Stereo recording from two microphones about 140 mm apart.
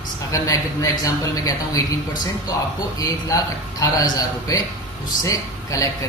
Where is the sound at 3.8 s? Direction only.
25° left (ahead or behind).